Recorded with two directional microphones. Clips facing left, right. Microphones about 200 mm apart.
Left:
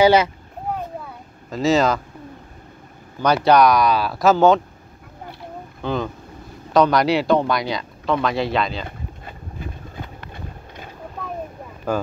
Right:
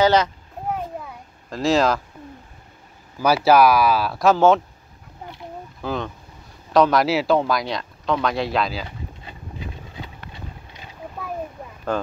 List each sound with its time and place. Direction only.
0.0 s speech: 10° left (ahead or behind)
1.5 s speech: centre (ahead or behind)
3.2 s speech: 5° right (ahead or behind)
5.8 s speech: centre (ahead or behind)
8.8 s a sound: 50° left (ahead or behind)